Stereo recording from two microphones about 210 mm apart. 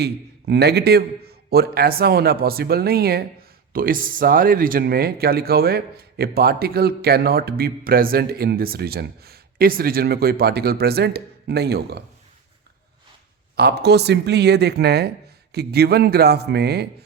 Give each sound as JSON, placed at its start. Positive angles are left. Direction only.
{"t": 0.0, "sound": "speech", "side_deg": -50}
{"t": 13.6, "sound": "speech", "side_deg": -50}